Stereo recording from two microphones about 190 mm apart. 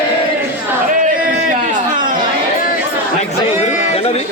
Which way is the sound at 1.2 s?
45° right (ahead or behind).